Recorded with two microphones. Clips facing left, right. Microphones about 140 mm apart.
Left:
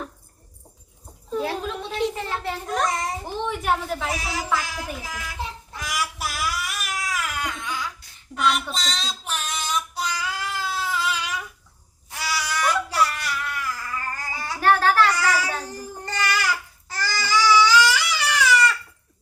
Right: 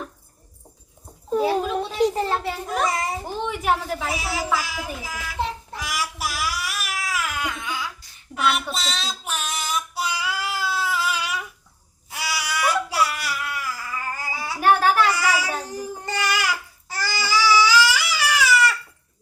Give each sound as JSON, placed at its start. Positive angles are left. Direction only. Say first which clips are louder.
{"t": 1.4, "sound": "a sound", "louder": "right 5 dB", "side_deg": -5}
{"t": 2.0, "sound": "a child's voice", "louder": "right 5 dB", "side_deg": -40}
{"t": 2.4, "sound": "a child's voice", "louder": "right 1 dB", "side_deg": -5}
{"t": 5.8, "sound": "a sound", "louder": "even", "side_deg": -5}
{"t": 8.4, "sound": "child singing", "louder": "even", "side_deg": -5}
{"t": 12.1, "sound": "baby cry", "louder": "even", "side_deg": -10}